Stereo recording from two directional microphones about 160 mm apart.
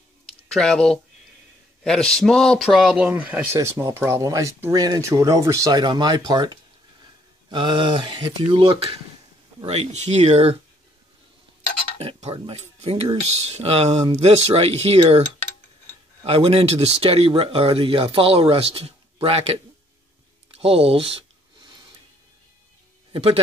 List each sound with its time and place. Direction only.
0.5 s a man's voice: 5° left (ahead or behind); by 10.6 s 40° right (ahead or behind)
12.0 s speech: 40° right (ahead or behind)
16.2 s speech: 35° right (ahead or behind)
20.5 s a sound: 35° right (ahead or behind)
23.1 s speech: 35° right (ahead or behind)